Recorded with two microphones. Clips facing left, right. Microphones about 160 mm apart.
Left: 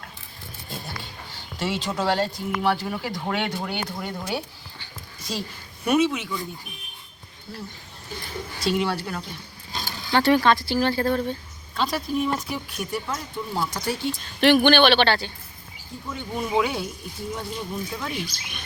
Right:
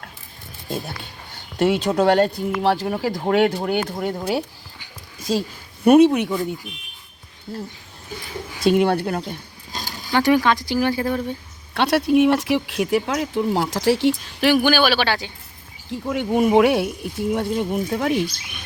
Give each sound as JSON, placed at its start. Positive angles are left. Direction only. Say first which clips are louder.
{"t": 1.5, "sound": "speech", "louder": "right 9 dB", "side_deg": -60}
{"t": 2.8, "sound": "speech", "louder": "right 7 dB", "side_deg": -45}
{"t": 5.3, "sound": "a woman's voice", "louder": "right 9 dB", "side_deg": -40}
{"t": 5.8, "sound": "speech", "louder": "right 9 dB", "side_deg": -55}
{"t": 7.5, "sound": "speech", "louder": "right 6 dB", "side_deg": -45}
{"t": 9.8, "sound": "speech", "louder": "right 2 dB", "side_deg": -15}
{"t": 11.7, "sound": "speech", "louder": "right 8 dB", "side_deg": -75}
{"t": 14.4, "sound": "speech", "louder": "even", "side_deg": -5}
{"t": 15.9, "sound": "speech", "louder": "right 11 dB", "side_deg": -70}